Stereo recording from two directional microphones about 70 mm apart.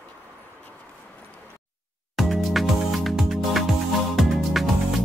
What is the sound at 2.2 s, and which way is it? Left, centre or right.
Music, centre.